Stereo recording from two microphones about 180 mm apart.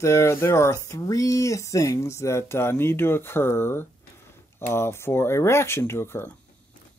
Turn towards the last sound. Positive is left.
turn(degrees=15)  # may be behind; listen again after turning